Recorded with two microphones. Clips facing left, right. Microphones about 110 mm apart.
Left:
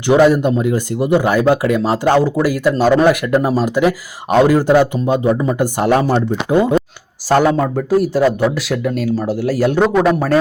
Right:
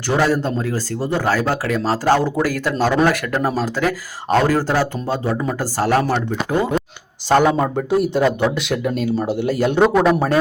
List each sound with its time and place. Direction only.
0.1 s speech: 15° left (ahead or behind)
7.4 s speech: 10° right (ahead or behind)